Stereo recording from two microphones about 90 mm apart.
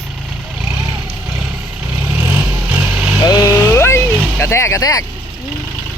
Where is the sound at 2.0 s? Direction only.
25° right (ahead or behind).